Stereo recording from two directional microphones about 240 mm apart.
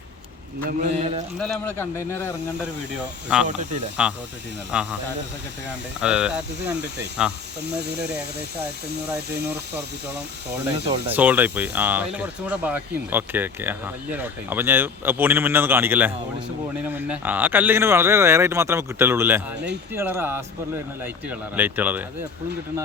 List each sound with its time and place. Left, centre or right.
0.6 s speech: right
1.4 s speech: centre
4.0 s speech: centre
6.0 s speech: centre
7.6 s speech: right
10.8 s speech: right
11.1 s speech: centre